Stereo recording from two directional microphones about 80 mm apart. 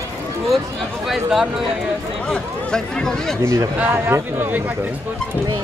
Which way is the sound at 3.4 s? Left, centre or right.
Right.